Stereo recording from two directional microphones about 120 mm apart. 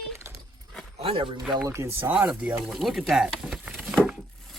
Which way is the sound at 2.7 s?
Centre (ahead or behind).